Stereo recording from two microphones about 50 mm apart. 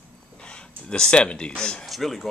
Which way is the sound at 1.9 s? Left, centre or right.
Centre.